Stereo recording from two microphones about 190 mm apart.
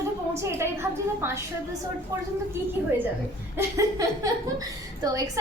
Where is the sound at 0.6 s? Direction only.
15° right (ahead or behind).